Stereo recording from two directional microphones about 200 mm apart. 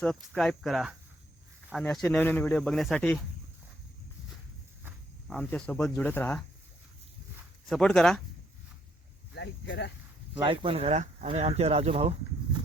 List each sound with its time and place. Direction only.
0.0 s speech: centre (ahead or behind)
5.3 s speech: 5° left (ahead or behind)
7.7 s speech: 5° left (ahead or behind)
9.3 s speech: 60° left (ahead or behind)
10.4 s speech: 25° right (ahead or behind)